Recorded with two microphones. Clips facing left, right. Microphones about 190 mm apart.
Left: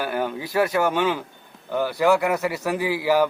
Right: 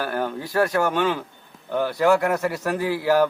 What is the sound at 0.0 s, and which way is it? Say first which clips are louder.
A man's voice: even; 10° left (ahead or behind).